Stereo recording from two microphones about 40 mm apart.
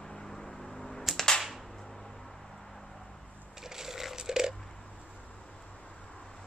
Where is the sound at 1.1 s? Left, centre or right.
Centre.